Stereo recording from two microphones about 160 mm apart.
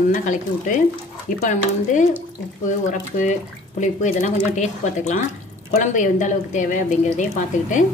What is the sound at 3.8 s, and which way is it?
A woman's voice, 50° left (ahead or behind).